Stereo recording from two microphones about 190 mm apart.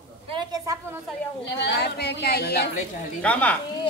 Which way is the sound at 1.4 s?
65° left (ahead or behind).